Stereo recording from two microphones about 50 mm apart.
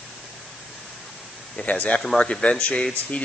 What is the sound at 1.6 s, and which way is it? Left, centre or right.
Speech, left.